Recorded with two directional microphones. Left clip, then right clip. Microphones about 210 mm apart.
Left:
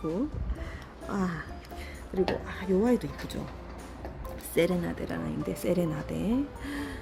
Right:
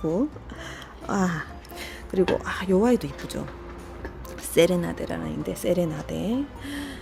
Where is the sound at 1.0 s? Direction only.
25° right (ahead or behind).